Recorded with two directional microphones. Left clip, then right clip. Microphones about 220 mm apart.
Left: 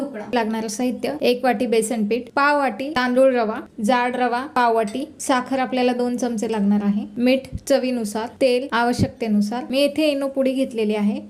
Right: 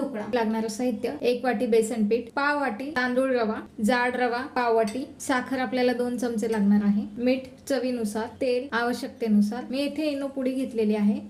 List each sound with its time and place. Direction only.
0.3 s a woman's voice: 35° left (ahead or behind)